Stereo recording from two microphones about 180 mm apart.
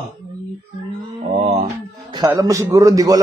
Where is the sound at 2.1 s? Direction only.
20° right (ahead or behind).